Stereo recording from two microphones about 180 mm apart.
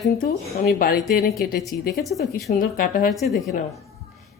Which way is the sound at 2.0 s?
Centre (ahead or behind).